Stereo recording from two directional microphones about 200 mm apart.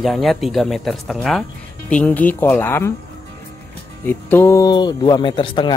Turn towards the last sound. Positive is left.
turn(degrees=25)  # may be behind; listen again after turning